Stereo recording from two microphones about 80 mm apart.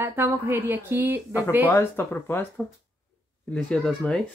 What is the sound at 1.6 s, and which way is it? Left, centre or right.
Speech, left.